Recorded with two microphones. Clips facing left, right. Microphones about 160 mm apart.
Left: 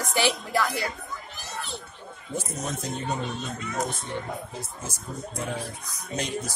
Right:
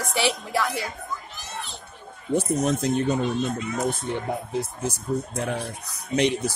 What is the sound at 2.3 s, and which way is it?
Speech, 65° right (ahead or behind).